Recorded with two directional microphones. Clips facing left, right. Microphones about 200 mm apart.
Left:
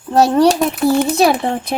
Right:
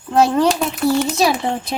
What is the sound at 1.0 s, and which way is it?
Speech, 55° left (ahead or behind).